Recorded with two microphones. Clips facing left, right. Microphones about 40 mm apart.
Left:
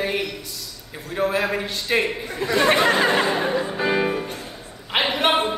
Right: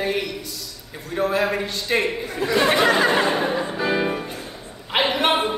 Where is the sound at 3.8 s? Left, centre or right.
Centre.